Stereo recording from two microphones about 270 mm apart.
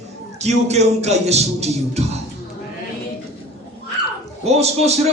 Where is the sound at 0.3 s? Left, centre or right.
Right.